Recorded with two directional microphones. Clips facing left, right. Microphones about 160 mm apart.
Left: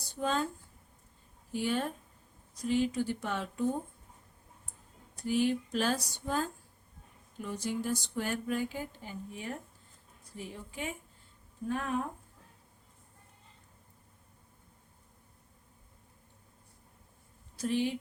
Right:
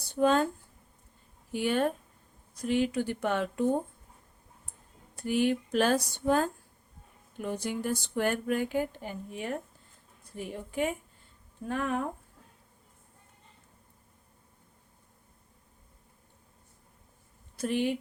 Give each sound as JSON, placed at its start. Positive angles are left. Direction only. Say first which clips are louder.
{"t": 0.2, "sound": "speech", "louder": "right 8 dB", "side_deg": -65}
{"t": 1.5, "sound": "speech", "louder": "right 5 dB", "side_deg": -65}
{"t": 5.1, "sound": "speech", "louder": "right 2 dB", "side_deg": -60}
{"t": 17.6, "sound": "speech", "louder": "right 2 dB", "side_deg": -60}